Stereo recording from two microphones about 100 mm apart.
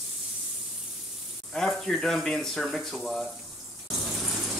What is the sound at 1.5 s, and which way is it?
Speech, centre (ahead or behind).